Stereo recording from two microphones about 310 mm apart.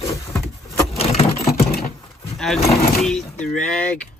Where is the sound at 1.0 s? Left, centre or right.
Centre.